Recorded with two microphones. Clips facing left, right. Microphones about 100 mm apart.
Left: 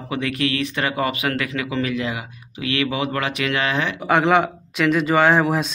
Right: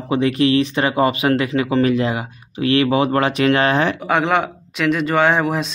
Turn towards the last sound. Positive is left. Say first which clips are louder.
# even
turn(degrees=0)  # may be behind; listen again after turning